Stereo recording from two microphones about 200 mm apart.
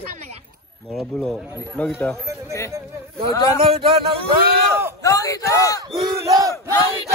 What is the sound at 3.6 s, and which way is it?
Speech, 25° right (ahead or behind).